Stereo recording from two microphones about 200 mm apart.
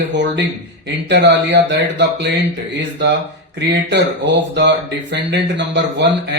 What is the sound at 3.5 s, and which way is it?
Speech, 60° right (ahead or behind).